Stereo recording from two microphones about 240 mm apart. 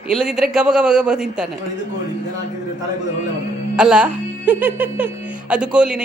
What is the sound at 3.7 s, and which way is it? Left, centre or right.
A man's voice, centre.